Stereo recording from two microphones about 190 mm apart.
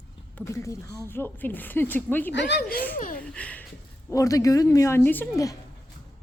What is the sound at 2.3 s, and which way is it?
Speech, 65° left (ahead or behind).